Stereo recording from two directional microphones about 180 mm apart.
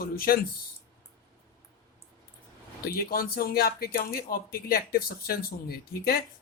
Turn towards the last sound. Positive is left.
turn(degrees=60)  # may be behind; listen again after turning